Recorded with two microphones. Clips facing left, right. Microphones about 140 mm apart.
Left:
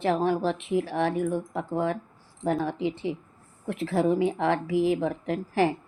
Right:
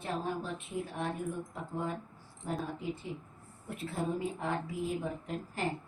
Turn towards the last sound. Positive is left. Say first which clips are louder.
# left 11 dB
turn(degrees=90)